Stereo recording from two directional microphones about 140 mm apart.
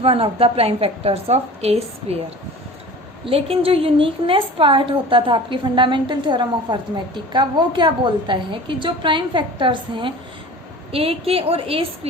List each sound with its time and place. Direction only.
0.0 s a woman's voice: 40° right (ahead or behind)
3.2 s a woman's voice: 45° right (ahead or behind)